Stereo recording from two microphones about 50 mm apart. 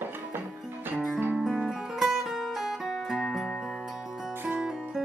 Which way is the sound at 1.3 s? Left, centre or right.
Centre.